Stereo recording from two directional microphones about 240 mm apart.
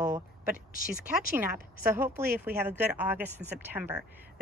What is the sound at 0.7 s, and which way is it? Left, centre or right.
Speech, left.